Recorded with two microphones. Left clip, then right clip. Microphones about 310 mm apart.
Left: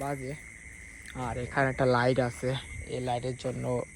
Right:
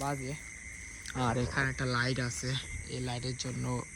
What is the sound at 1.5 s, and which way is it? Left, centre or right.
Speech, centre.